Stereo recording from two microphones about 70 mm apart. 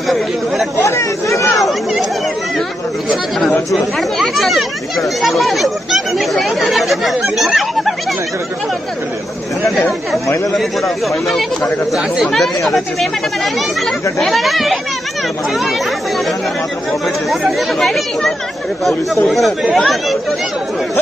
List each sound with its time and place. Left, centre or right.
0.8 s speech: left
1.6 s chatter: centre
3.1 s speech: centre
10.2 s speech: left
10.5 s speech: centre
17.3 s speech: centre